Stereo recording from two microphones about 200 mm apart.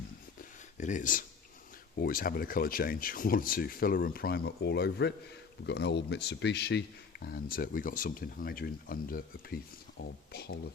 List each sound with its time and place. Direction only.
0.8 s speech: 40° left (ahead or behind)